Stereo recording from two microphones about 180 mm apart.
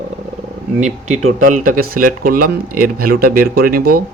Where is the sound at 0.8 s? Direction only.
40° right (ahead or behind).